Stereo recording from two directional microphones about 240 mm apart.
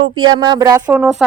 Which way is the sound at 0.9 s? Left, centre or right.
Centre.